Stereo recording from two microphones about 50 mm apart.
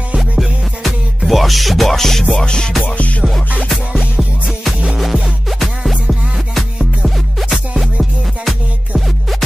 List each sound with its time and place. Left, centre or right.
0.4 s music: centre
2.3 s music: centre
4.9 s music: centre
7.3 s music: centre